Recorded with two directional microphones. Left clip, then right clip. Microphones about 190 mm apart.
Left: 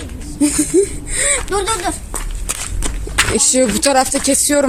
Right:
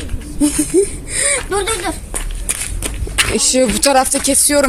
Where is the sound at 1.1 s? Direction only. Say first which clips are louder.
Even; centre (ahead or behind).